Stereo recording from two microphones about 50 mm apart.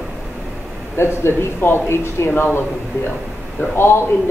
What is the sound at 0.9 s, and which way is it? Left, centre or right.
Speech, left.